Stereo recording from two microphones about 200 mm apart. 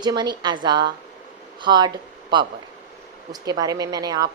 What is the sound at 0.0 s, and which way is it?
Speech, 20° right (ahead or behind).